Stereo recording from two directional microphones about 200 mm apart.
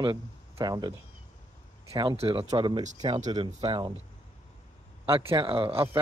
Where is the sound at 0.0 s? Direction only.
20° right (ahead or behind).